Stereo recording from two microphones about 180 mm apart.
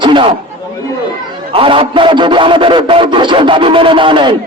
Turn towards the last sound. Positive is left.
turn(degrees=-25)  # may be behind; listen again after turning